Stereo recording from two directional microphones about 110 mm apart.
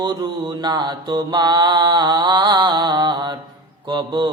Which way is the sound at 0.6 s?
40° right (ahead or behind).